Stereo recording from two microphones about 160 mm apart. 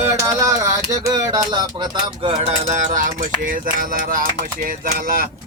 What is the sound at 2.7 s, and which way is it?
Speech, 50° right (ahead or behind).